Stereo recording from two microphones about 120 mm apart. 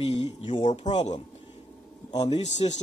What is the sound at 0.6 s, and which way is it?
Speech, 70° left (ahead or behind).